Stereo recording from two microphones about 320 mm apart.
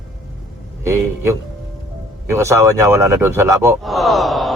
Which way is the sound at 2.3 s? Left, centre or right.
Centre.